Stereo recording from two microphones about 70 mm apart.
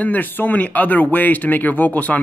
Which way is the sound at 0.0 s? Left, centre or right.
Left.